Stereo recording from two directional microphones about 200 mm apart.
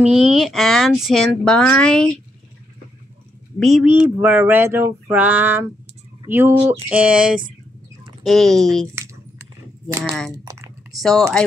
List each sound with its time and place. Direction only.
0.0 s speech: centre (ahead or behind)
3.5 s speech: centre (ahead or behind)
8.9 s a sound: 15° right (ahead or behind)
10.0 s speech: centre (ahead or behind)
10.3 s speech: 20° right (ahead or behind)
11.0 s speech: centre (ahead or behind)